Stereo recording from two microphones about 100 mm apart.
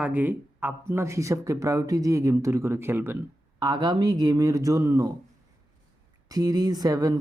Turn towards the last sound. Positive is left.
turn(degrees=-35)  # may be behind; listen again after turning